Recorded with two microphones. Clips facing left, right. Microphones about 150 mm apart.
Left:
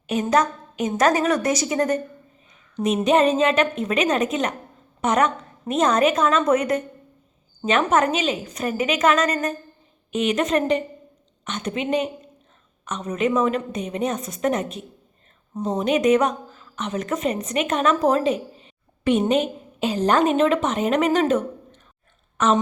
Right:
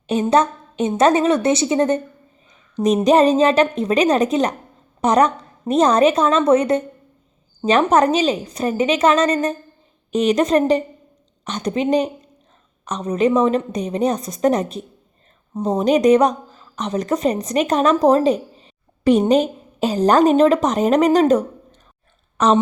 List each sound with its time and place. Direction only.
0.1 s a woman's voice: 30° right (ahead or behind)